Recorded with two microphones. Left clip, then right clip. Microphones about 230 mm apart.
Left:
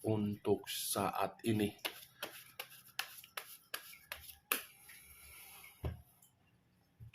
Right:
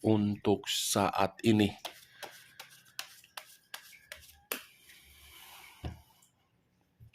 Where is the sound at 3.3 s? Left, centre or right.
Centre.